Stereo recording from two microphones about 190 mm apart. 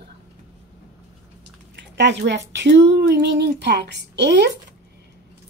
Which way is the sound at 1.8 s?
65° right (ahead or behind).